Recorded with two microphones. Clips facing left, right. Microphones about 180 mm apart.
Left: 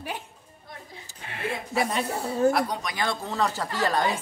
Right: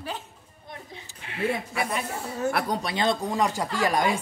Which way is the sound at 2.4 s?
35° left (ahead or behind).